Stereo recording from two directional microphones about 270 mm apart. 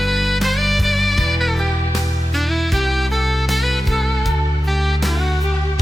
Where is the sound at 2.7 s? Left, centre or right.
Centre.